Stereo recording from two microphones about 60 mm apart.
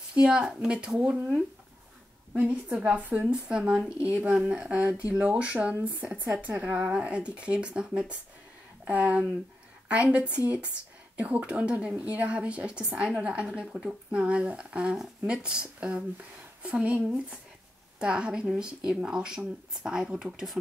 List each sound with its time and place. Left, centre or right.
0.1 s a woman's voice: centre
2.4 s a woman's voice: centre